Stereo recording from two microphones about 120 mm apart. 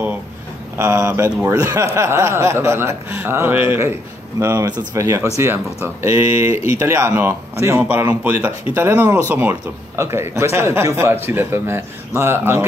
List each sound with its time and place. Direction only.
0.7 s speech: 20° right (ahead or behind)
4.4 s speech: 30° right (ahead or behind)